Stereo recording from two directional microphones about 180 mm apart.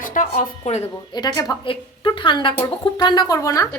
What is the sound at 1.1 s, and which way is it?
A woman's voice, 20° left (ahead or behind).